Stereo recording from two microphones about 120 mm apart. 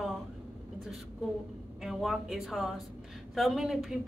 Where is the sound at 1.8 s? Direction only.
Centre (ahead or behind).